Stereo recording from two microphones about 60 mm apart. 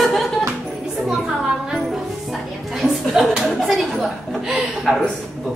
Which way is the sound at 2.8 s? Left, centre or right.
Centre.